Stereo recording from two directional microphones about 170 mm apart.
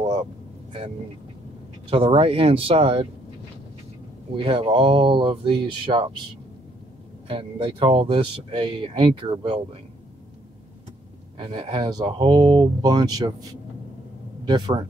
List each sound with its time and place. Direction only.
1.9 s speech: 35° right (ahead or behind)
4.4 s speech: 30° right (ahead or behind)
7.2 s speech: 30° right (ahead or behind)
11.3 s speech: 25° right (ahead or behind)
14.4 s speech: 25° right (ahead or behind)